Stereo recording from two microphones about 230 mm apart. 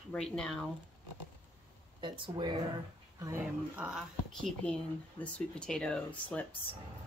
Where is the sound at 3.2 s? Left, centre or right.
Centre.